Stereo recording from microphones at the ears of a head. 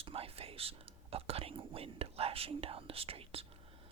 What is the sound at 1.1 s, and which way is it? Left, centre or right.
Speech, right.